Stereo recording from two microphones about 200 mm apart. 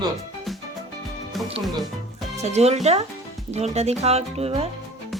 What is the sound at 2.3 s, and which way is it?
Speech, 35° right (ahead or behind).